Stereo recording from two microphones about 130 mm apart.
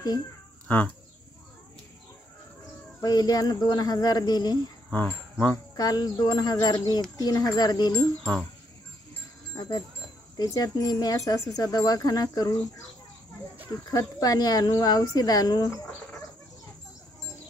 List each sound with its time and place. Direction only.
0.7 s speech: 10° left (ahead or behind)
3.0 s speech: 30° left (ahead or behind)
4.9 s speech: 15° left (ahead or behind)
5.8 s speech: 30° left (ahead or behind)
8.2 s speech: 10° left (ahead or behind)
9.6 s speech: 30° left (ahead or behind)